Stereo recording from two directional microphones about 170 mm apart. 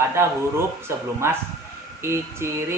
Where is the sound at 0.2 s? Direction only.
15° right (ahead or behind).